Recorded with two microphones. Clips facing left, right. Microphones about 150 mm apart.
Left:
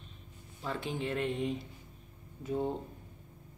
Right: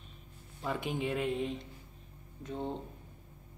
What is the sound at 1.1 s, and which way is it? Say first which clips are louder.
Speech: even; 5° right (ahead or behind).